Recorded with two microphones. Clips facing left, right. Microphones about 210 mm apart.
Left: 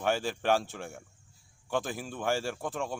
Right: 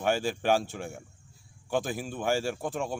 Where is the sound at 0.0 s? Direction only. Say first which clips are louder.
Right 2 dB; centre (ahead or behind).